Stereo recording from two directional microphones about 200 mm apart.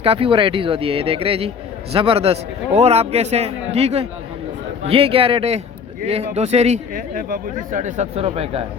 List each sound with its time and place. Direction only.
0.0 s speech: 30° right (ahead or behind)